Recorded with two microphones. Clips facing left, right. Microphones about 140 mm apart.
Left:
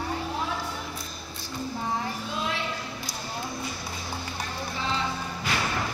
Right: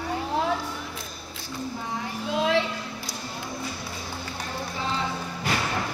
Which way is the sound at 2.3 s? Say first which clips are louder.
Right 10 dB; 90° right.